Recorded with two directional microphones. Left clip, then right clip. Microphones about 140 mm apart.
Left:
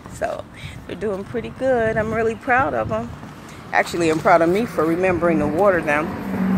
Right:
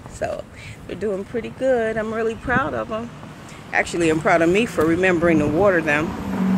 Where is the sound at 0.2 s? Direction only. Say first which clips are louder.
Left 1 dB; 20° right (ahead or behind).